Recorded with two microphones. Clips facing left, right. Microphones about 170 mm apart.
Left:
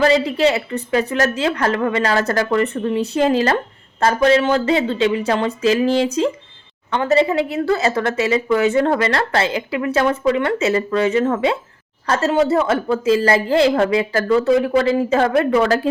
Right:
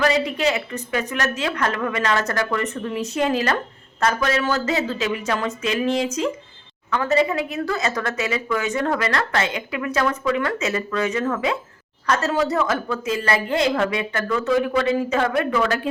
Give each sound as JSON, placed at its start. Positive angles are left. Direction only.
{"t": 0.0, "sound": "a woman's voice", "side_deg": 30}